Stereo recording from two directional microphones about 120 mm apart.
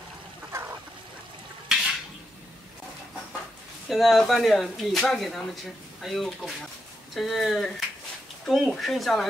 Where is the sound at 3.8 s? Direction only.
Centre (ahead or behind).